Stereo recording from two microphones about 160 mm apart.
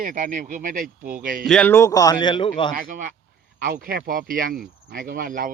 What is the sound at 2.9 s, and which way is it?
Speech, 60° right (ahead or behind).